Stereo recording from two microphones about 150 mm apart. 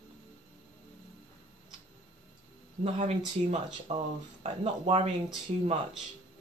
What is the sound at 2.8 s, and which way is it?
Speech, 45° right (ahead or behind).